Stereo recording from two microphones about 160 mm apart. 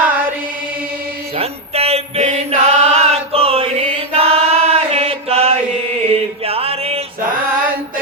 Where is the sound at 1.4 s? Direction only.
40° right (ahead or behind).